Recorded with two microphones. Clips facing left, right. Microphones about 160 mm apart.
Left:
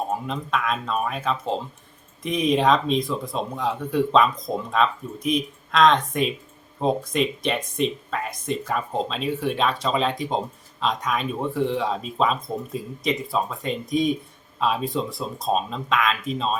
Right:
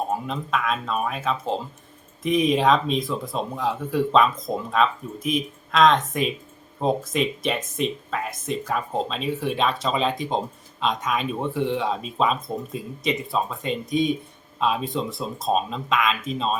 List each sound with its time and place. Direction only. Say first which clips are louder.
0.1 s speech: even; centre (ahead or behind)